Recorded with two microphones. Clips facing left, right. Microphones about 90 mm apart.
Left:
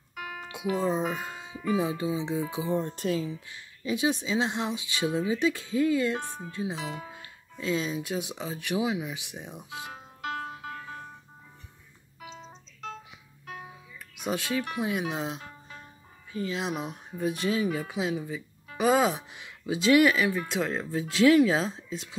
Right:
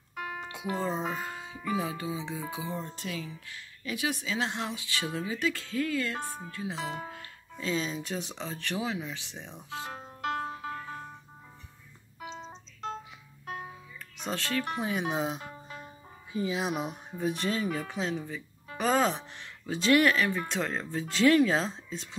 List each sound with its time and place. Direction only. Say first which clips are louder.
0.1 s music: right 1 dB; 35° right (ahead or behind)
0.5 s speech: left 5 dB; 20° left (ahead or behind)
2.7 s music: left 9 dB; 45° left (ahead or behind)
3.2 s speech: left 7 dB; 25° left (ahead or behind)
7.5 s speech: left 2 dB; 5° left (ahead or behind)
10.4 s music: right 2 dB; 30° right (ahead or behind)
12.2 s music: right 3 dB; 40° right (ahead or behind)
13.9 s music: left 4 dB; 10° left (ahead or behind)
14.8 s speech: even; centre (ahead or behind)
16.3 s music: right 1 dB; 15° right (ahead or behind)
16.5 s speech: even; 5° right (ahead or behind)